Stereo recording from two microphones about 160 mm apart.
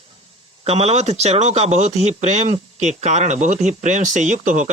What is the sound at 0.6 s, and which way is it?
Speech, 40° right (ahead or behind).